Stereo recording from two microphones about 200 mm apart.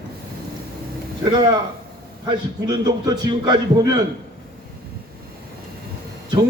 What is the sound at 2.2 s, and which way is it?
A man's voice, 20° right (ahead or behind).